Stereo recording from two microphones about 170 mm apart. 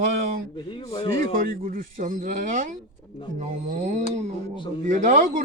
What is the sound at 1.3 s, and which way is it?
A man's voice, 55° right (ahead or behind).